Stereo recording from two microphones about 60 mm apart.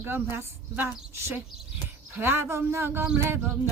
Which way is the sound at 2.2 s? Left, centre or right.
Right.